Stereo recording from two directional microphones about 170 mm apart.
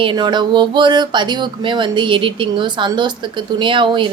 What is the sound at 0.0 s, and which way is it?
A woman's voice, 30° right (ahead or behind).